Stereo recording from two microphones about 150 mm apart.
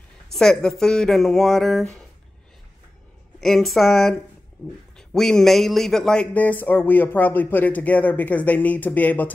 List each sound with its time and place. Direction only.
0.3 s speech: 5° left (ahead or behind)
3.3 s a man's voice: centre (ahead or behind)